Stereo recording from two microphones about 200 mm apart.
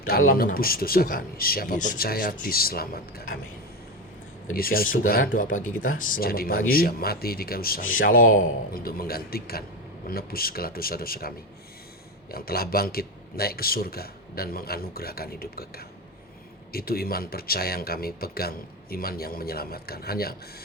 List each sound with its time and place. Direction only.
0.3 s speech: 45° left (ahead or behind)
4.5 s speech: 50° left (ahead or behind)